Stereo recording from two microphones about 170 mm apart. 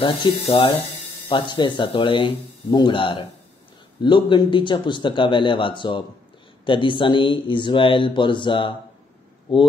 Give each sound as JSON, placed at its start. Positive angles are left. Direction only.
{"t": 0.0, "sound": "speech", "side_deg": 25}